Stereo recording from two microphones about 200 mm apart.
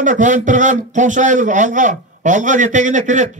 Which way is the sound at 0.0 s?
40° right (ahead or behind).